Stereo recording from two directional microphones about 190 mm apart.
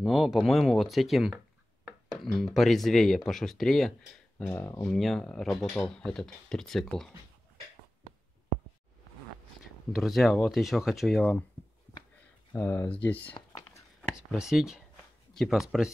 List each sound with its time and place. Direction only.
0.0 s speech: centre (ahead or behind)
9.9 s speech: centre (ahead or behind)
12.5 s speech: 10° left (ahead or behind)
13.3 s a sound: 20° left (ahead or behind)
14.0 s speech: 5° right (ahead or behind)